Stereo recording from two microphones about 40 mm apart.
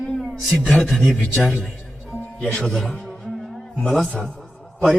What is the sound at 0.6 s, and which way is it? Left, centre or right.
Speech, left.